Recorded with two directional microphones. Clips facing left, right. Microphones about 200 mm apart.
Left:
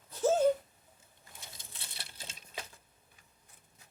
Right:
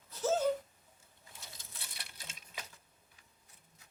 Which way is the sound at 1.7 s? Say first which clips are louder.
Left 2 dB; 30° left (ahead or behind).